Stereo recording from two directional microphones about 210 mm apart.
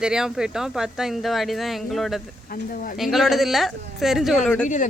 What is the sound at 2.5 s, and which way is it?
Speech, 45° left (ahead or behind).